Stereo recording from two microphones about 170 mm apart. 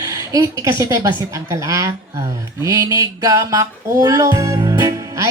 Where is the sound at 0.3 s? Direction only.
20° right (ahead or behind).